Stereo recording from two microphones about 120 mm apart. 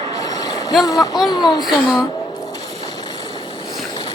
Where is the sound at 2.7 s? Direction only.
35° left (ahead or behind).